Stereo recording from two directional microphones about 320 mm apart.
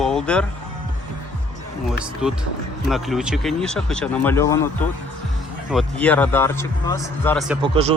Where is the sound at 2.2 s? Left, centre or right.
Centre.